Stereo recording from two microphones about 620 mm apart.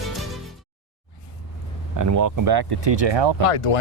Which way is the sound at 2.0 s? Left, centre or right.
Right.